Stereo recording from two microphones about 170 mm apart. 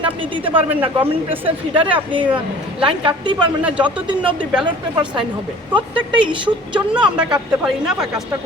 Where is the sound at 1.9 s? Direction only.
30° right (ahead or behind).